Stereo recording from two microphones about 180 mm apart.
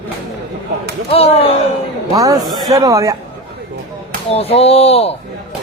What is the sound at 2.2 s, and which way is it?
Speech, 20° right (ahead or behind).